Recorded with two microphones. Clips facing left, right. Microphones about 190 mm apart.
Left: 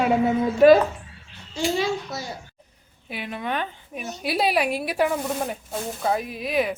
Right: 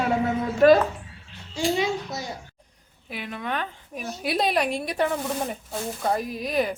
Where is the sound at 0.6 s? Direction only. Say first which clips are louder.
Left 2 dB; 5° left (ahead or behind).